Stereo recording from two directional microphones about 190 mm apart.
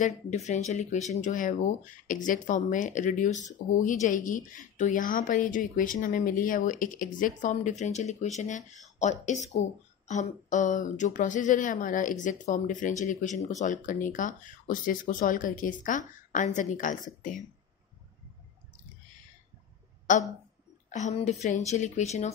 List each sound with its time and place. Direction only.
0.0 s speech: 35° left (ahead or behind)
20.1 s speech: 40° left (ahead or behind)